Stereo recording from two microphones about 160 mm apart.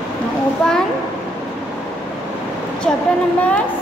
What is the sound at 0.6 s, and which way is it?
Speech, 5° left (ahead or behind).